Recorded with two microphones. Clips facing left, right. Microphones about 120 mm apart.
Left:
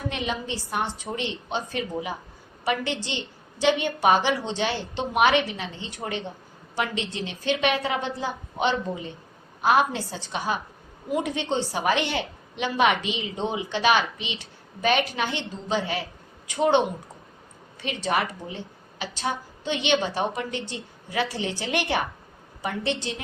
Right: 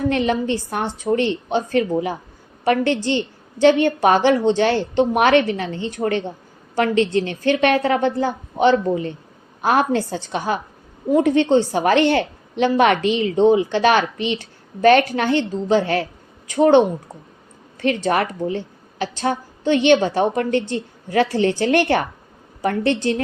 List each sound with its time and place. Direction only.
0.1 s a woman's voice: 60° right (ahead or behind)
9.6 s a woman's voice: 55° right (ahead or behind)